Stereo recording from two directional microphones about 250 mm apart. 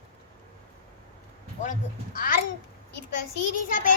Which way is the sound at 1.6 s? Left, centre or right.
Left.